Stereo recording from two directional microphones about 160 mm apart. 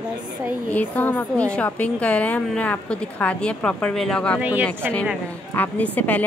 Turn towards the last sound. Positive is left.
turn(degrees=10)  # may be behind; listen again after turning